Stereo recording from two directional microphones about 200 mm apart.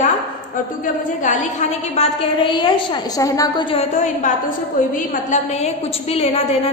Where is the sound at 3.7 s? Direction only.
35° left (ahead or behind).